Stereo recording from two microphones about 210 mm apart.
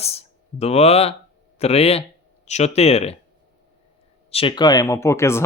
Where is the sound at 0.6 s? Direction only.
30° left (ahead or behind).